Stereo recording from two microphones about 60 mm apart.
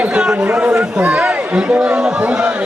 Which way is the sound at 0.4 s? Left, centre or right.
Right.